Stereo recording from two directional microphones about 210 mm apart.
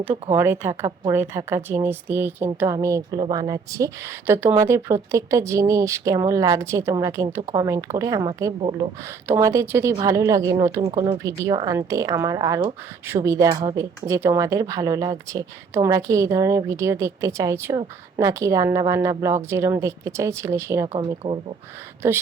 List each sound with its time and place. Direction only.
0.3 s a woman's voice: 10° right (ahead or behind)
13.5 s speech: 25° right (ahead or behind)
14.1 s a woman's voice: 15° right (ahead or behind)
20.9 s speech: 25° right (ahead or behind)